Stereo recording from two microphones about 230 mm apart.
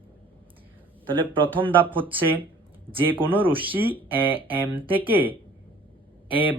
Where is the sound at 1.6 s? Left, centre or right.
Right.